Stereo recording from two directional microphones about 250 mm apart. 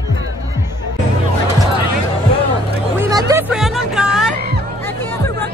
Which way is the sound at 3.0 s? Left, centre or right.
Centre.